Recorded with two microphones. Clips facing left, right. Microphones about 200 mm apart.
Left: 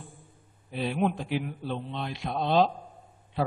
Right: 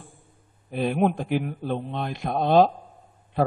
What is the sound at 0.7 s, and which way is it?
A man's voice, 50° right (ahead or behind).